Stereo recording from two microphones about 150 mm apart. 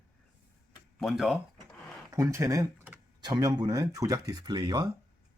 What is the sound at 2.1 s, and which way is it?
Speech, 20° right (ahead or behind).